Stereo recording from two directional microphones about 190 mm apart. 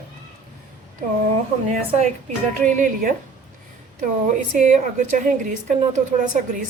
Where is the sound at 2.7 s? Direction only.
45° right (ahead or behind).